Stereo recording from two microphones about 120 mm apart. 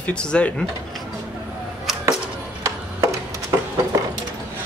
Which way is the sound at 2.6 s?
25° right (ahead or behind).